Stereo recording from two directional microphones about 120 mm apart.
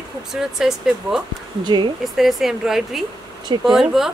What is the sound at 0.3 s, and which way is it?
Speech, 5° right (ahead or behind).